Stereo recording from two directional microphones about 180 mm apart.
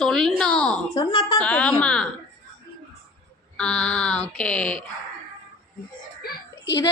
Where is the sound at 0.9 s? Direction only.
25° left (ahead or behind).